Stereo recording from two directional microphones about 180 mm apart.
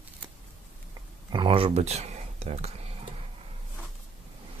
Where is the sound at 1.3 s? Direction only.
25° right (ahead or behind).